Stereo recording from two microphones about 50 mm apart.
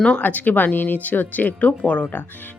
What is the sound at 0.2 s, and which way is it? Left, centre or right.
Speech, left.